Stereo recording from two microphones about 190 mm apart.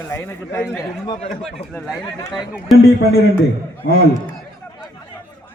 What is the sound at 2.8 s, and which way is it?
A man's voice, 55° left (ahead or behind).